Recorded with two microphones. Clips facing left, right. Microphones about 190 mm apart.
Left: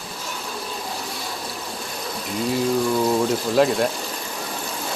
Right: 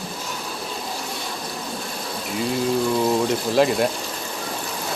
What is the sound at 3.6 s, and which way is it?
Speech, centre (ahead or behind).